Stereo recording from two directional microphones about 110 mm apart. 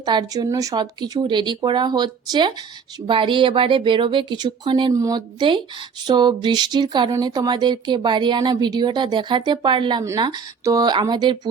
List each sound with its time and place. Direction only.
0.0 s speech: 40° right (ahead or behind)
4.9 s speech: 30° right (ahead or behind)
5.4 s speech: 45° right (ahead or behind)